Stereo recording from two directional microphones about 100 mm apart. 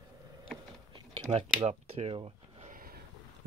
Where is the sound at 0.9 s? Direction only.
50° right (ahead or behind).